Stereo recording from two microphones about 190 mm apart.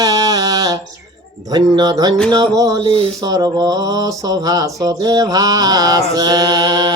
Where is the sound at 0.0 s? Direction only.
20° right (ahead or behind).